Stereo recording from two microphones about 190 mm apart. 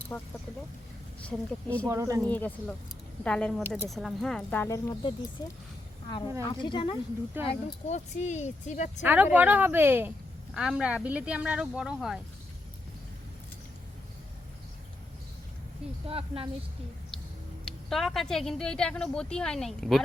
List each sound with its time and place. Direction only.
0.1 s a woman's voice: 5° left (ahead or behind)
1.9 s speech: 15° right (ahead or behind)
2.2 s a woman's voice: 10° left (ahead or behind)
6.4 s speech: 20° left (ahead or behind)
7.4 s speech: 35° left (ahead or behind)
9.0 s a woman's voice: 10° right (ahead or behind)
16.0 s speech: 30° right (ahead or behind)
17.7 s a woman's voice: centre (ahead or behind)